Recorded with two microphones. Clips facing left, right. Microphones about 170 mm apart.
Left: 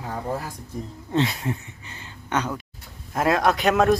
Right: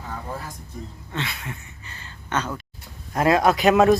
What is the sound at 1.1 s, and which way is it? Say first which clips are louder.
Speech: left 9 dB; 35° left (ahead or behind).